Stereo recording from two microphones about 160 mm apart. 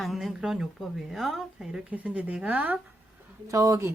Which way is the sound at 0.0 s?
Centre (ahead or behind).